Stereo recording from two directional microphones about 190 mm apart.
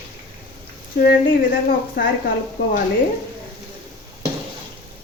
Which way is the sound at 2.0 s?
65° left (ahead or behind).